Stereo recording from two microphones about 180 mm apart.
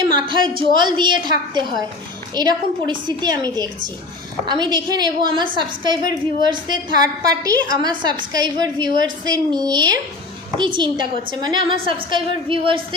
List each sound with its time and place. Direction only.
0.1 s a woman's voice: 25° right (ahead or behind)